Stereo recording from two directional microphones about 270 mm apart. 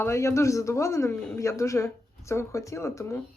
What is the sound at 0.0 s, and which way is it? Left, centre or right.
Speech, centre.